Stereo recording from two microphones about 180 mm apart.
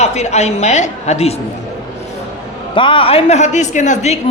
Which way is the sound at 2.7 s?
30° left (ahead or behind).